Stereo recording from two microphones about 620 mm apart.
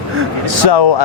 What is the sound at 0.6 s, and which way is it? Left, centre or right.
Speech, left.